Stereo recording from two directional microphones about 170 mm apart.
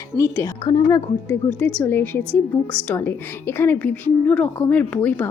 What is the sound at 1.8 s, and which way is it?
Speech, 10° left (ahead or behind).